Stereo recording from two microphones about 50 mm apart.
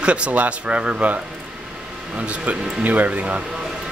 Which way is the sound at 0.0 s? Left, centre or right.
Right.